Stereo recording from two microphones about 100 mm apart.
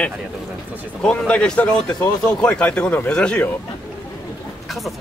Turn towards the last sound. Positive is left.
turn(degrees=0)  # may be behind; listen again after turning